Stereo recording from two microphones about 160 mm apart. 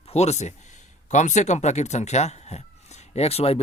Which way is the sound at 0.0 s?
40° left (ahead or behind).